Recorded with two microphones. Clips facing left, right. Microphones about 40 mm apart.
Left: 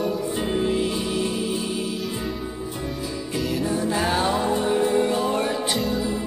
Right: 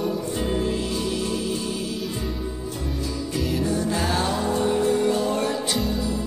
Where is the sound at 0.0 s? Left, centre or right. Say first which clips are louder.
Left 1 dB; centre.